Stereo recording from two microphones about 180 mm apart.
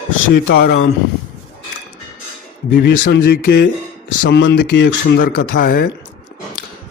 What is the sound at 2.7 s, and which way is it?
Speech, 55° left (ahead or behind).